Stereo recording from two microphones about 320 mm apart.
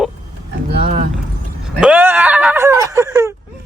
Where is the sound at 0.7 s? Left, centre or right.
Right.